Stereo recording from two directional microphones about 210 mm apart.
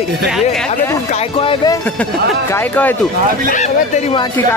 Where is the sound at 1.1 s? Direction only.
30° left (ahead or behind).